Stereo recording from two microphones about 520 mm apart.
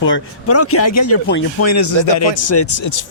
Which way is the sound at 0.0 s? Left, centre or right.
Left.